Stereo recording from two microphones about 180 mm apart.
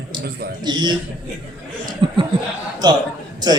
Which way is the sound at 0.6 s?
25° right (ahead or behind).